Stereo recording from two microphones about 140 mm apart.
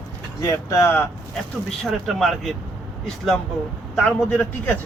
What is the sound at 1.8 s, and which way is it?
Speech, centre (ahead or behind).